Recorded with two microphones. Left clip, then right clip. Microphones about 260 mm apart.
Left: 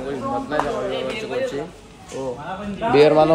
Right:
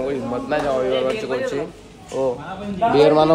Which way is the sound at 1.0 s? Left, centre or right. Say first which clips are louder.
Right 3 dB; centre.